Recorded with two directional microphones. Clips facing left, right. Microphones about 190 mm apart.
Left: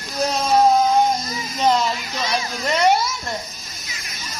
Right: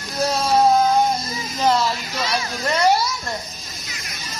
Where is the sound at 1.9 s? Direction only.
15° left (ahead or behind).